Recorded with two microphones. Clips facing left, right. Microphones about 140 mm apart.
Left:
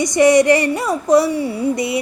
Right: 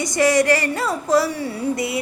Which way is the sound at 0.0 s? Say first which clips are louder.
Left 5 dB; 20° left (ahead or behind).